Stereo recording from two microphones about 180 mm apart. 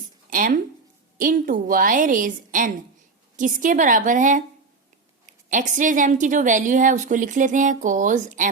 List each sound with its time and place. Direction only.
0.3 s a woman's voice: 50° right (ahead or behind)